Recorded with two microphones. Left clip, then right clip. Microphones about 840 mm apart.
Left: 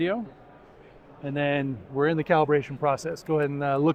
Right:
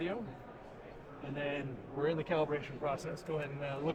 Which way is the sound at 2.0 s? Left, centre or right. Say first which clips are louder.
Left 11 dB; left.